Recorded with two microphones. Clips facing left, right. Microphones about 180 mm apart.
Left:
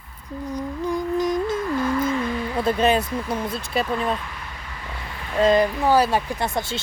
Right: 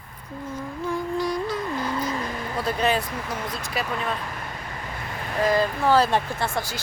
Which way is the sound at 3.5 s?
60° left (ahead or behind).